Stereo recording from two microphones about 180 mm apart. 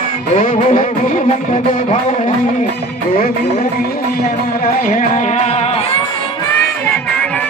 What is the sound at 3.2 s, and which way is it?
Music, 55° left (ahead or behind).